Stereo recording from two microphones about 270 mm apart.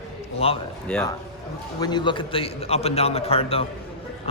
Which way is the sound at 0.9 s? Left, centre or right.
Centre.